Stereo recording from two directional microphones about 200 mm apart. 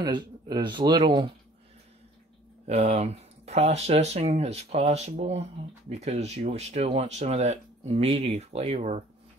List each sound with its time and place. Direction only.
0.0 s speech: 20° right (ahead or behind)
2.6 s speech: 30° right (ahead or behind)